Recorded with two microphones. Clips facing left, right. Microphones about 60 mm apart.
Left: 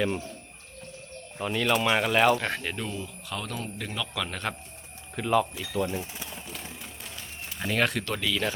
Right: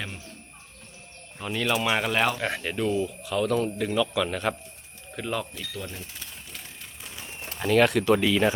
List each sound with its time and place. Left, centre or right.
1.4 s speech: centre
7.6 s speech: centre
8.0 s speech: centre